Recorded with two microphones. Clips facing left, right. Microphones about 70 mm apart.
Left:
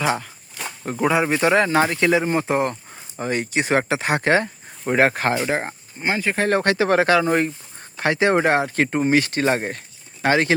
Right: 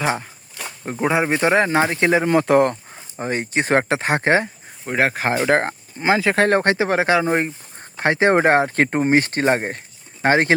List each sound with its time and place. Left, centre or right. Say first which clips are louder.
0.0 s speech: even; right
2.2 s speech: right 5 dB; right
3.2 s speech: right 1 dB; right
4.9 s speech: left 2 dB; centre
5.5 s speech: right 6 dB; right
6.5 s speech: right 2 dB; right
6.8 s speech: left 1 dB; centre; by 10.5 s right